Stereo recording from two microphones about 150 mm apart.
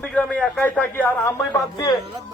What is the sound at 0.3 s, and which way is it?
Speech, 10° left (ahead or behind).